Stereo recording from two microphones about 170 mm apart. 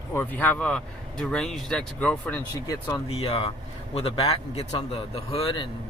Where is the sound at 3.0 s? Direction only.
35° left (ahead or behind).